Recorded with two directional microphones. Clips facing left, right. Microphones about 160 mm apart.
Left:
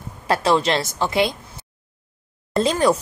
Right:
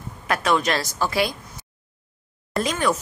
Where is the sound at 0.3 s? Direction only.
30° left (ahead or behind).